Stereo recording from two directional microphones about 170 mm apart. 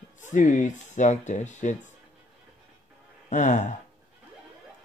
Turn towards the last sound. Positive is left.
turn(degrees=45)  # may be behind; listen again after turning